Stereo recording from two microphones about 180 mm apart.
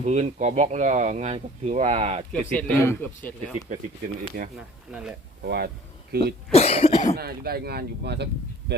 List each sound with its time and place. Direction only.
0.0 s speech: 40° right (ahead or behind)
2.3 s a man's voice: 10° left (ahead or behind)
3.7 s speech: 45° right (ahead or behind)
4.9 s speech: 5° right (ahead or behind)
5.4 s a sound: 60° right (ahead or behind)
6.5 s cough: 35° left (ahead or behind)
7.2 s speech: 60° right (ahead or behind)